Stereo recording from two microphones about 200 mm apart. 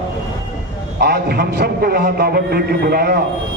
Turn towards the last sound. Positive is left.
turn(degrees=-50)  # may be behind; listen again after turning